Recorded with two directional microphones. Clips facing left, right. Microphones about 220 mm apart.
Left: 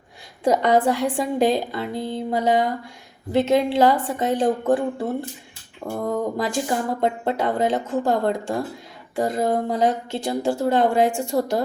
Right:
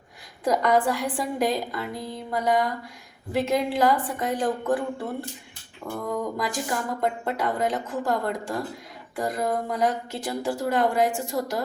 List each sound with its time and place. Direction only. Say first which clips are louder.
0.4 s speech: left 4 dB; 25° left (ahead or behind)
6.1 s speech: left 4 dB; 25° left (ahead or behind)